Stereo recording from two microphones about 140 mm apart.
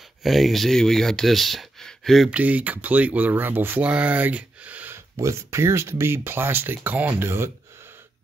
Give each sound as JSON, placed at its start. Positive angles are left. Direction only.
{"t": 0.2, "sound": "speech", "side_deg": 0}
{"t": 5.2, "sound": "speech", "side_deg": -20}